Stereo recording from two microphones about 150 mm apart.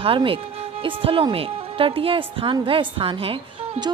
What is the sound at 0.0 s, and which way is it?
Speech, 35° right (ahead or behind).